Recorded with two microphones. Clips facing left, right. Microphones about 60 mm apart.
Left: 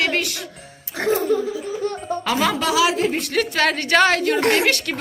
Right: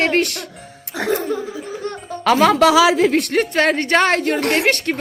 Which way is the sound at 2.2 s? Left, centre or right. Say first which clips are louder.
Right 9 dB; right.